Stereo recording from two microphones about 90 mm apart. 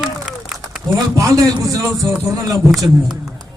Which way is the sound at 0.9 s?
40° right (ahead or behind).